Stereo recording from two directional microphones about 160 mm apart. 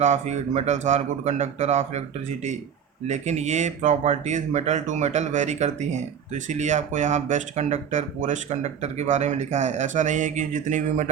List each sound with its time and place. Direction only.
0.0 s speech: 45° right (ahead or behind)